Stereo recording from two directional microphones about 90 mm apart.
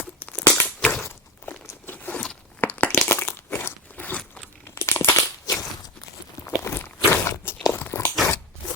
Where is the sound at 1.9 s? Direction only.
20° left (ahead or behind).